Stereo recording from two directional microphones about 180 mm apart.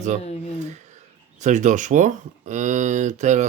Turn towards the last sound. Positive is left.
turn(degrees=-40)  # may be behind; listen again after turning